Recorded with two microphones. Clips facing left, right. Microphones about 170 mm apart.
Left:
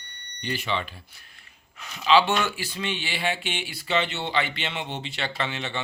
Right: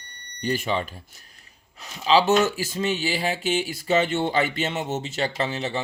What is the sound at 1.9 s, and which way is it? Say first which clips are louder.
Speech: right 2 dB; 35° right (ahead or behind).